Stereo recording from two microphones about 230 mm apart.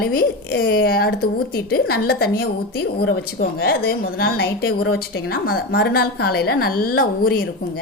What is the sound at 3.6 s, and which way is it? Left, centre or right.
A woman's voice, left.